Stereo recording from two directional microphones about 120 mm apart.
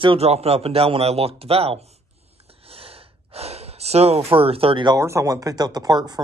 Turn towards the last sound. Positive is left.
turn(degrees=-35)  # may be behind; listen again after turning